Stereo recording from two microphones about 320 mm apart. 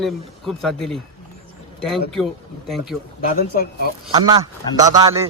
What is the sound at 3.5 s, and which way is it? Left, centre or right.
Speech, left.